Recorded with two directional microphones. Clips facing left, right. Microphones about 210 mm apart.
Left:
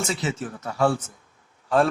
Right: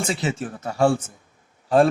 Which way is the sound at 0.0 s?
30° right (ahead or behind).